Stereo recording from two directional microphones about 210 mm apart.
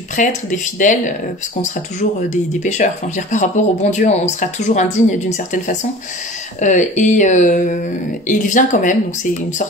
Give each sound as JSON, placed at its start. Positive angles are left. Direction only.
{"t": 0.1, "sound": "speech", "side_deg": 35}
{"t": 2.2, "sound": "speech", "side_deg": 35}
{"t": 6.6, "sound": "speech", "side_deg": 35}